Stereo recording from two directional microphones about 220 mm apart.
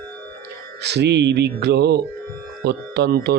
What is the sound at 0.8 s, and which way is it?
A man's voice, 50° right (ahead or behind).